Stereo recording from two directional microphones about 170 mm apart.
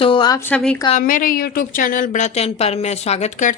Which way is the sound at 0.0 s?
30° left (ahead or behind).